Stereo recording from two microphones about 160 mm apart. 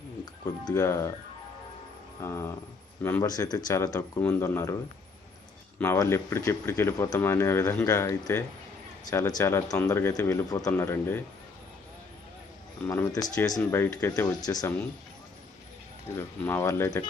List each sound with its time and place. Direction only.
0.6 s a man's voice: 20° left (ahead or behind)
2.2 s a man's voice: 20° left (ahead or behind)
5.8 s a man's voice: 15° left (ahead or behind)
12.8 s a man's voice: 15° left (ahead or behind)
16.1 s speech: 15° left (ahead or behind)